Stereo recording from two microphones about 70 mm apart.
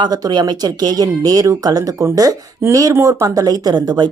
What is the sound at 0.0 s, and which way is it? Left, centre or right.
Speech, right.